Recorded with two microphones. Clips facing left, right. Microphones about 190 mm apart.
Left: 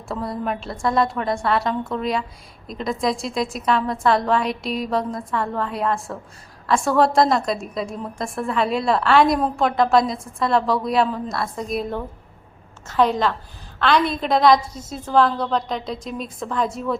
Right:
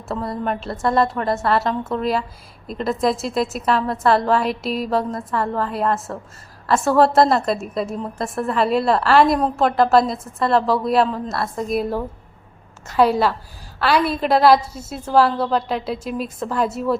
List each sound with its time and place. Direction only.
0.1 s a woman's voice: centre (ahead or behind)